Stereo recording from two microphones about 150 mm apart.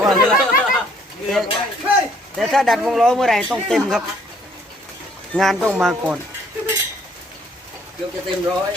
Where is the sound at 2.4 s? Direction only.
Centre (ahead or behind).